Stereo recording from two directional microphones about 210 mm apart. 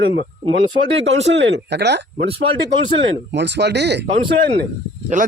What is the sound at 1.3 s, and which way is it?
Speech, 55° right (ahead or behind).